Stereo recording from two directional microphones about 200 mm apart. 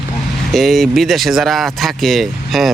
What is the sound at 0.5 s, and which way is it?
Speech, centre (ahead or behind).